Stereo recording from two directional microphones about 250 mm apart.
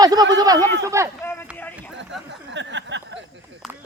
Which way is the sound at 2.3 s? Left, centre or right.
Right.